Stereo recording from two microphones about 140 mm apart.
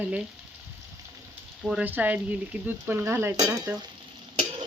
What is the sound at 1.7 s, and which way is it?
Speech, 10° right (ahead or behind).